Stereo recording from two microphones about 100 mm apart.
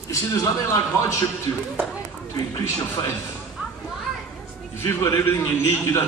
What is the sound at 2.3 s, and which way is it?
Speech, 35° left (ahead or behind).